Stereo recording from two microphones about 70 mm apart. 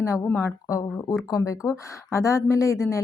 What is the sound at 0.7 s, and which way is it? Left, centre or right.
Speech, left.